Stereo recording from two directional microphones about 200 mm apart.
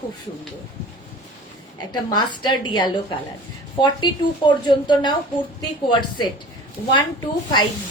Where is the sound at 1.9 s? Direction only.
20° left (ahead or behind).